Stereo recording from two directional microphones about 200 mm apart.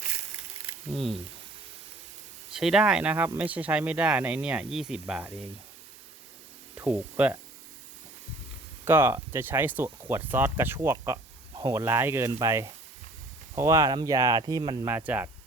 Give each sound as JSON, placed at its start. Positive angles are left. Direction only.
{"t": 2.5, "sound": "speech", "side_deg": 0}
{"t": 6.7, "sound": "speech", "side_deg": -10}
{"t": 8.8, "sound": "speech", "side_deg": -10}
{"t": 14.8, "sound": "speech", "side_deg": -10}